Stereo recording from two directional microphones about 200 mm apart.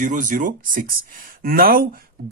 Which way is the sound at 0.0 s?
40° right (ahead or behind).